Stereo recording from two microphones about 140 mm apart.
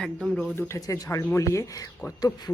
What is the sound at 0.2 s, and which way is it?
Speech, 5° left (ahead or behind).